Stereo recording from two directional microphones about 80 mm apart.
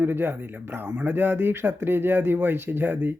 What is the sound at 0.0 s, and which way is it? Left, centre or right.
Speech, right.